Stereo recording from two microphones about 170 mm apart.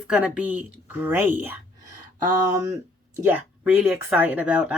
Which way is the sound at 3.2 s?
10° right (ahead or behind).